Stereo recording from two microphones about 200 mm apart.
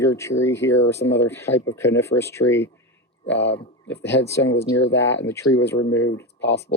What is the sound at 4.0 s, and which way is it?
Speech, 60° left (ahead or behind).